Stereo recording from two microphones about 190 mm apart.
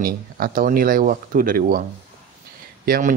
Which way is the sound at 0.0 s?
50° right (ahead or behind).